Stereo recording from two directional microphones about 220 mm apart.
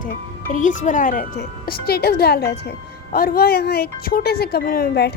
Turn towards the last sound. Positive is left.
turn(degrees=45)  # may be behind; listen again after turning